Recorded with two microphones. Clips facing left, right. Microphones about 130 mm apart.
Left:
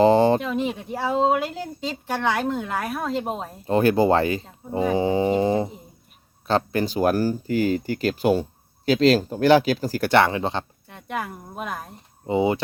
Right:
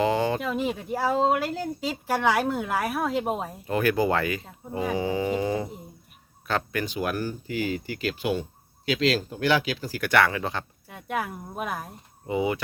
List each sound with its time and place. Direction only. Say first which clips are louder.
0.0 s a sound: left 8 dB; 30° left (ahead or behind)
0.3 s speech: left 3 dB; 5° right (ahead or behind)
3.7 s speech: left 6 dB; 30° left (ahead or behind)
10.1 s speech: left 3 dB; 25° left (ahead or behind)
10.8 s speech: even; 5° right (ahead or behind)
12.2 s speech: left 5 dB; 30° left (ahead or behind)